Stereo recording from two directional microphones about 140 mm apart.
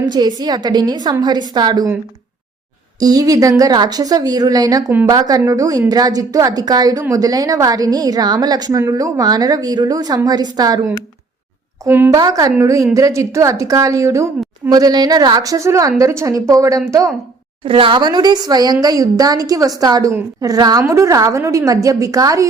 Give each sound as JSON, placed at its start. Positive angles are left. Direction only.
{"t": 0.0, "sound": "a woman's voice", "side_deg": -30}
{"t": 3.0, "sound": "a woman's voice", "side_deg": -25}
{"t": 11.9, "sound": "a woman's voice", "side_deg": -15}
{"t": 12.1, "sound": "a woman's voice", "side_deg": -25}
{"t": 17.7, "sound": "a woman's voice", "side_deg": -40}